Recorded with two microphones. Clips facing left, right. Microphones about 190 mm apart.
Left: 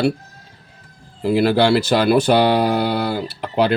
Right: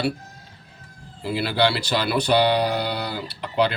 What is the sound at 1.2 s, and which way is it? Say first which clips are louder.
Speech: left 7 dB; 45° left (ahead or behind).